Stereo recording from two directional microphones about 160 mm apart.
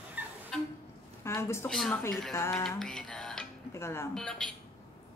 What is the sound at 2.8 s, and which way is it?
Music, 5° left (ahead or behind).